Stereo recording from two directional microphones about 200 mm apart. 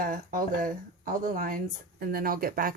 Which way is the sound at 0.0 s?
45° right (ahead or behind).